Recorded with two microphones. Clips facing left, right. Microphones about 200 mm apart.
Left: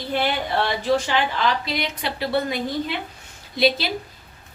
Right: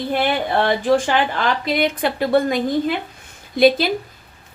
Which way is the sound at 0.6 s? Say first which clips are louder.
Right 6 dB; 50° right (ahead or behind).